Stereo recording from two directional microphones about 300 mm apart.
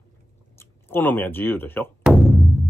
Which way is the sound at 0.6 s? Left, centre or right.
Centre.